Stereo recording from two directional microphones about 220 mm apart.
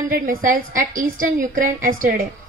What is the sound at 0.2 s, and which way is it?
A woman's voice, 40° right (ahead or behind).